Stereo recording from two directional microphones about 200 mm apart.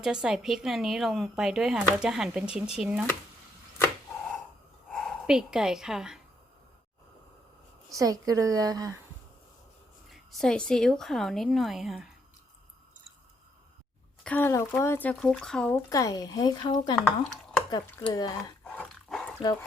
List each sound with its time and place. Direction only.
0.0 s a woman's voice: 5° right (ahead or behind)
4.9 s speech: centre (ahead or behind)
7.9 s speech: 20° right (ahead or behind)
10.1 s a woman's voice: centre (ahead or behind)
14.3 s speech: 10° left (ahead or behind)
15.9 s speech: 15° left (ahead or behind)
16.9 s speech: 5° left (ahead or behind)
18.1 s speech: 20° left (ahead or behind)
18.8 s dog: 5° left (ahead or behind)